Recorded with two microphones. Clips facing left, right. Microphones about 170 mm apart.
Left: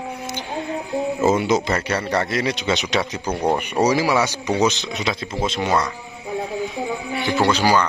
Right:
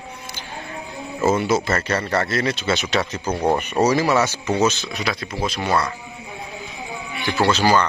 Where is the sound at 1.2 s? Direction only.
20° left (ahead or behind).